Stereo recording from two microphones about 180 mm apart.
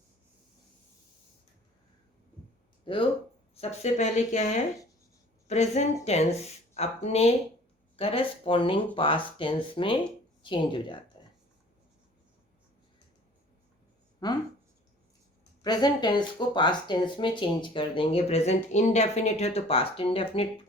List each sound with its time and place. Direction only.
2.8 s speech: 30° left (ahead or behind)
14.2 s speech: 25° left (ahead or behind)
15.6 s speech: 25° left (ahead or behind)